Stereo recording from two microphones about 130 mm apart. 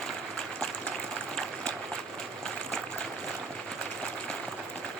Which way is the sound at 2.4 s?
5° left (ahead or behind).